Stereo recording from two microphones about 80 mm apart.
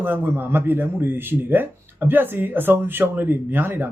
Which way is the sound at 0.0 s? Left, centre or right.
Right.